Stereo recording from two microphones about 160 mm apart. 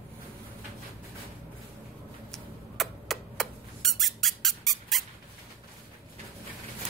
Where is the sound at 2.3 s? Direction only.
Centre (ahead or behind).